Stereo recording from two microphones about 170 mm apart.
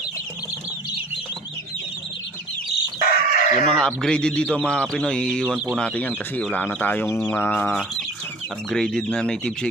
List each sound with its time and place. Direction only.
3.1 s chicken: 60° left (ahead or behind)
3.8 s speech: 5° left (ahead or behind)